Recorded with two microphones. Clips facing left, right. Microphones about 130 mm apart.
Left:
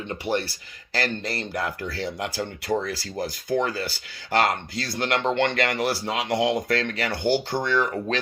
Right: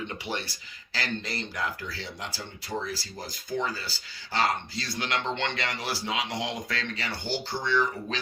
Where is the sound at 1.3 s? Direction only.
55° left (ahead or behind).